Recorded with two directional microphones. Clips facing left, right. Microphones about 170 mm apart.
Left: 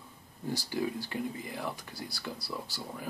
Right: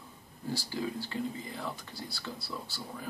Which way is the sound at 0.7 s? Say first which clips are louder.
Left 3 dB; 15° left (ahead or behind).